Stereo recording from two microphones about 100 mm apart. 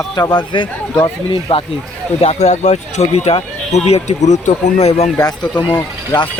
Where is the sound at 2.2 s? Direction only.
90° left.